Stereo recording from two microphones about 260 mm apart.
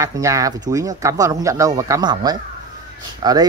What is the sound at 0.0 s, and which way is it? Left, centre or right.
Speech, centre.